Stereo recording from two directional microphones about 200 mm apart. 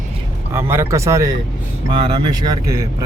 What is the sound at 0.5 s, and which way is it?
Speech, 15° right (ahead or behind).